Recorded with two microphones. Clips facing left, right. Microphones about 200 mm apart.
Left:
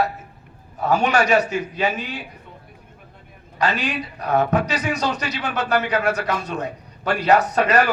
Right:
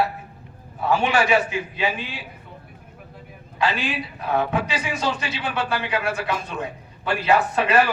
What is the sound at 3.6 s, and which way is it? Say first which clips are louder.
Speech: left 1 dB; 40° left (ahead or behind).